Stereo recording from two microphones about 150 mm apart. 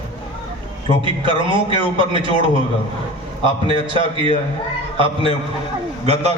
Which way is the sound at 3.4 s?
35° right (ahead or behind).